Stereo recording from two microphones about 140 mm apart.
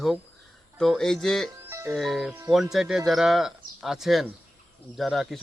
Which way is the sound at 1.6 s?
15° right (ahead or behind).